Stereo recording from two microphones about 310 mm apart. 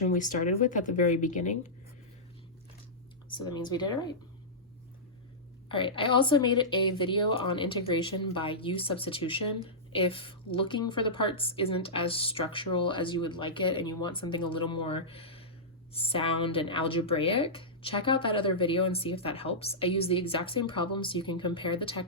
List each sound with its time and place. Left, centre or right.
0.1 s speech: left
3.2 s speech: centre
5.6 s speech: centre